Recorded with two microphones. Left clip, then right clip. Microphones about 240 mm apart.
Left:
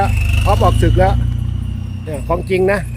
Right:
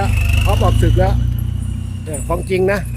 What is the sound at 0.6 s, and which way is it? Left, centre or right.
Speech, left.